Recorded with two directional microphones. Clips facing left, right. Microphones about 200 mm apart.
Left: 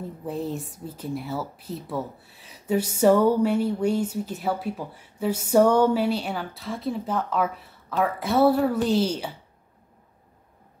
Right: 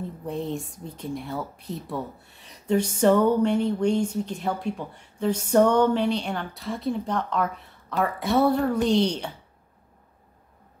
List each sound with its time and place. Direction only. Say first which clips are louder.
0.2 s speech: left 1 dB; centre (ahead or behind)